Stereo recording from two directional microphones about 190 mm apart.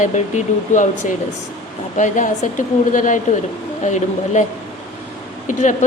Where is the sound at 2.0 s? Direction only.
40° left (ahead or behind).